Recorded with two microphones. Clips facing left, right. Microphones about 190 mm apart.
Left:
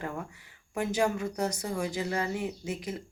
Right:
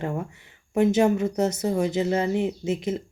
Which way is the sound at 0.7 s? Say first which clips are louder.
Right 9 dB; 25° right (ahead or behind).